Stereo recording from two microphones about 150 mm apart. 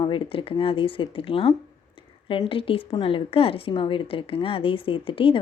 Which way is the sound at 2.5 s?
35° left (ahead or behind).